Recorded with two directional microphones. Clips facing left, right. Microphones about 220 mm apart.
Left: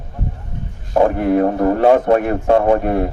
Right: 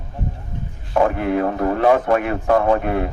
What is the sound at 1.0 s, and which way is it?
A man's voice, 30° left (ahead or behind).